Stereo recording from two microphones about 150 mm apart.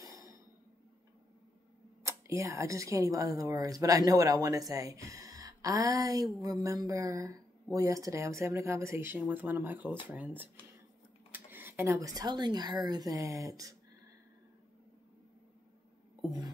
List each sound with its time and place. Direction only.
0.0 s a sound: 20° right (ahead or behind)
2.0 s speech: 20° right (ahead or behind)
16.3 s speech: 25° right (ahead or behind)